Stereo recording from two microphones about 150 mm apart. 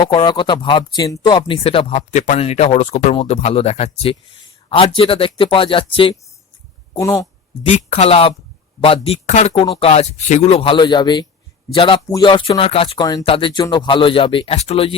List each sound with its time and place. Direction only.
0.0 s speech: 30° left (ahead or behind)
6.9 s speech: 25° left (ahead or behind)
7.7 s speech: 45° left (ahead or behind)